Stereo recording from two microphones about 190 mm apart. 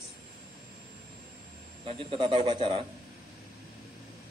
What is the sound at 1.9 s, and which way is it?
Speech, 30° right (ahead or behind).